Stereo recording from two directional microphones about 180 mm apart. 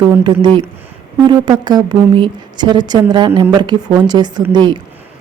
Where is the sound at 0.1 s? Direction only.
25° right (ahead or behind).